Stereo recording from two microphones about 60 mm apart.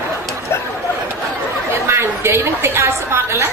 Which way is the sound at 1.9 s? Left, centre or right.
Right.